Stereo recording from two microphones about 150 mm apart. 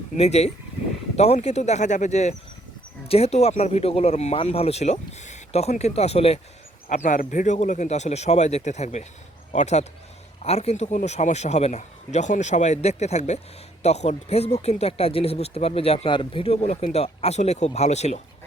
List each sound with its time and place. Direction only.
0.2 s speech: 45° left (ahead or behind)
6.9 s speech: 55° left (ahead or behind)